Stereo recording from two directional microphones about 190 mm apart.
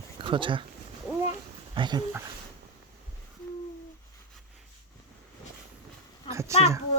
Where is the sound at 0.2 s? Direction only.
25° right (ahead or behind).